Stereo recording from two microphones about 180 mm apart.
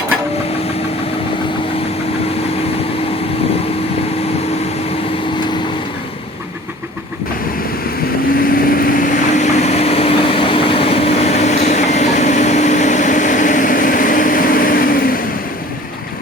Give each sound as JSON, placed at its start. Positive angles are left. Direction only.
{"t": 8.4, "sound": "vehicle", "side_deg": 55}